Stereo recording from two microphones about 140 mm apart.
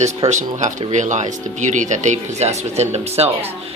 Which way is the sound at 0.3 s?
55° right (ahead or behind).